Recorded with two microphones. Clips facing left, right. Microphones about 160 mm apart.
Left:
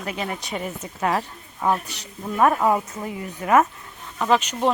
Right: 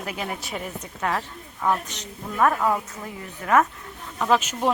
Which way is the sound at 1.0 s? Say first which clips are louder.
Left 3 dB; 15° left (ahead or behind).